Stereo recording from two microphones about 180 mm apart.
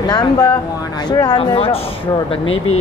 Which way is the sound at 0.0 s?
25° left (ahead or behind).